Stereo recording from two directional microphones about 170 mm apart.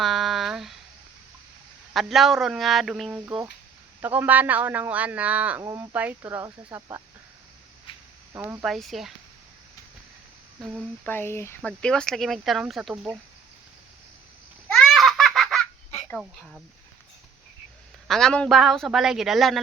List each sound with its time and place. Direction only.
0.0 s a sound: centre (ahead or behind)
1.9 s speech: centre (ahead or behind); by 7.0 s 20° right (ahead or behind)
7.9 s a sound: 30° left (ahead or behind)
8.3 s speech: 15° right (ahead or behind)
8.6 s speech: centre (ahead or behind)
10.6 s speech: 5° right (ahead or behind)
11.0 s speech: 10° left (ahead or behind); by 13.1 s 5° right (ahead or behind)
14.7 s baby laughter: centre (ahead or behind)
16.0 s speech: centre (ahead or behind)
18.1 s speech: 5° left (ahead or behind)